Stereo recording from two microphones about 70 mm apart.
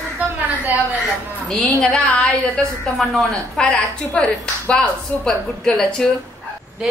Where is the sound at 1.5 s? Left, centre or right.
Centre.